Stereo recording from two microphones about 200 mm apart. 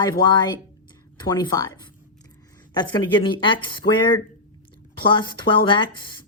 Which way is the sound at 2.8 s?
25° left (ahead or behind).